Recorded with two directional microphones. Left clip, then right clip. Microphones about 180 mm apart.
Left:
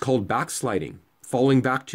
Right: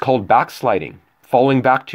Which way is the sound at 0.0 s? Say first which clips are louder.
Right 10 dB; 25° left (ahead or behind).